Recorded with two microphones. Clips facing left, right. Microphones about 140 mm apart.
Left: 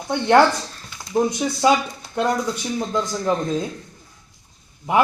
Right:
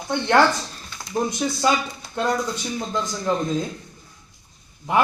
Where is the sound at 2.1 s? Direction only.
20° left (ahead or behind).